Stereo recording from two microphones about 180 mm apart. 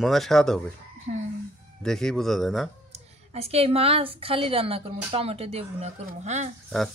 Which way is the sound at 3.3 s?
35° right (ahead or behind).